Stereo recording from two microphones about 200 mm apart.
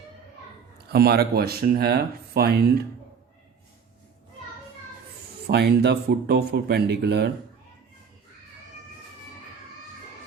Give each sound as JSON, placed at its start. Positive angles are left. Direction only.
{"t": 0.9, "sound": "speech", "side_deg": -50}
{"t": 5.5, "sound": "speech", "side_deg": -55}